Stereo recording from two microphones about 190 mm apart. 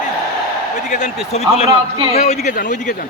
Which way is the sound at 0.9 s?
40° left (ahead or behind).